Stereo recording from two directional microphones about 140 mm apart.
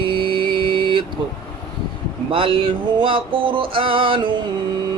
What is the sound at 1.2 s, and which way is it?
Music, 35° right (ahead or behind).